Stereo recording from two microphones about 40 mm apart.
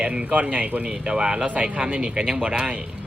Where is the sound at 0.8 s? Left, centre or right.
Right.